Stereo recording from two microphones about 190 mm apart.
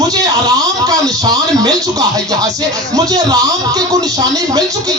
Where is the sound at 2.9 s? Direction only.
20° right (ahead or behind).